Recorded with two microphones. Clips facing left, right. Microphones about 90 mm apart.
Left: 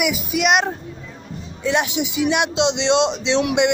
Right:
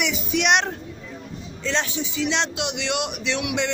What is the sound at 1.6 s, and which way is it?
A man's voice, 15° left (ahead or behind).